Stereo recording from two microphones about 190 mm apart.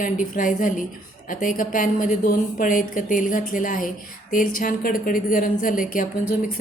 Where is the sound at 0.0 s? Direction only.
45° left (ahead or behind).